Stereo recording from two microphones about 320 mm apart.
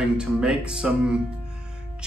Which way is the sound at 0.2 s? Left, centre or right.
Centre.